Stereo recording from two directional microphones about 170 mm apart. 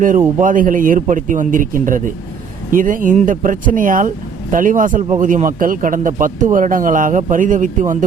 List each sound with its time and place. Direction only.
0.3 s speech: 50° right (ahead or behind)